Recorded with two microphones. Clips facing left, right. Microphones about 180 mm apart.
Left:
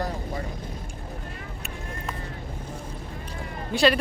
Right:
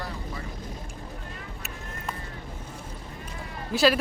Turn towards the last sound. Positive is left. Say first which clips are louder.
# left 1 dB
turn(degrees=0)  # may be behind; listen again after turning